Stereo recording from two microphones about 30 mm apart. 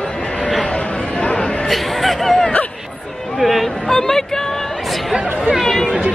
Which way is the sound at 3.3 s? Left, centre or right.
Centre.